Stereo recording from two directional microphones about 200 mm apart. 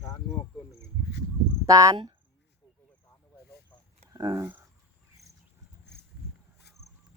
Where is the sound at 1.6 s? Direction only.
15° right (ahead or behind).